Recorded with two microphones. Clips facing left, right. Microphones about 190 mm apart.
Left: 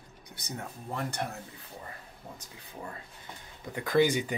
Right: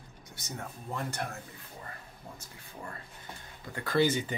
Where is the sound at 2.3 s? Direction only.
15° left (ahead or behind).